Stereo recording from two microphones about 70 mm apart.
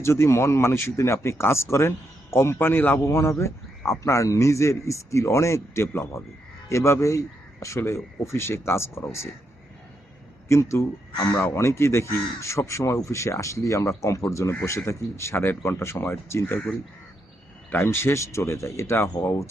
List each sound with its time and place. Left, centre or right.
0.0 s speech: left
2.6 s speech: left
3.0 s speech: left
10.5 s speech: left
17.7 s speech: left